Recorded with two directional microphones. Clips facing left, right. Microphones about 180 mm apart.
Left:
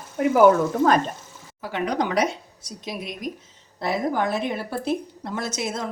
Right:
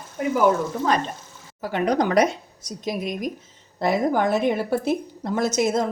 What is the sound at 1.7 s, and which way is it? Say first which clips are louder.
A woman's voice: right 4 dB; 45° right (ahead or behind).